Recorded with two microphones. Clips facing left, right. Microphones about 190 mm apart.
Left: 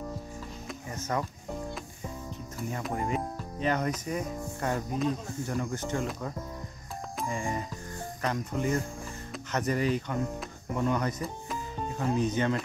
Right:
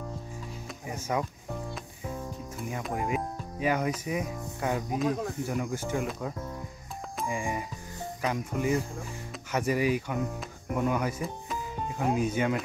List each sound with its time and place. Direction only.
0.8 s speech: 10° right (ahead or behind)
2.7 s speech: 5° right (ahead or behind)
5.0 s speech: 65° right (ahead or behind)
5.5 s speech: 10° right (ahead or behind)